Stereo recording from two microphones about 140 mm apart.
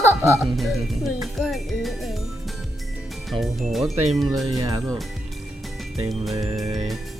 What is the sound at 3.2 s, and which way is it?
Speech, centre (ahead or behind).